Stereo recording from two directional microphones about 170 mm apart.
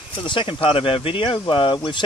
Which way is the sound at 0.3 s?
30° left (ahead or behind).